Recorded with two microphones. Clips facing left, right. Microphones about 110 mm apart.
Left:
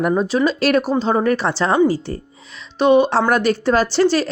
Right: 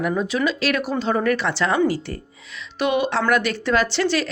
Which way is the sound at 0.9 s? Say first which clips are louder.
Left 4 dB; 30° left (ahead or behind).